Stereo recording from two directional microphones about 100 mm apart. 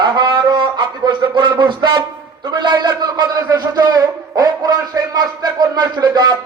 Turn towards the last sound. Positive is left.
turn(degrees=-45)  # may be behind; listen again after turning